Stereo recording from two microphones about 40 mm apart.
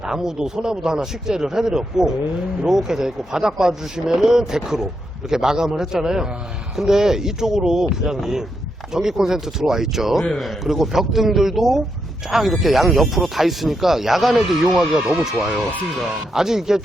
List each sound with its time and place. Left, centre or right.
0.1 s speech: centre